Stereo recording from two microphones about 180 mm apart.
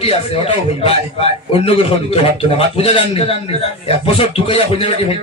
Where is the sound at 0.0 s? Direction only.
30° left (ahead or behind).